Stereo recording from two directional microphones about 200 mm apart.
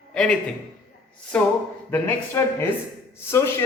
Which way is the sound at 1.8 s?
10° left (ahead or behind).